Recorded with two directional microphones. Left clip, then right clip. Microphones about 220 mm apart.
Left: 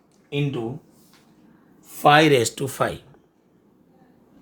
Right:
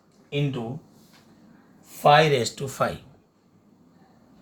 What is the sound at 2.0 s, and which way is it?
Speech, 50° left (ahead or behind).